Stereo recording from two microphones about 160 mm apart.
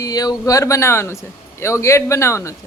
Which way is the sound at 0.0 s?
25° left (ahead or behind).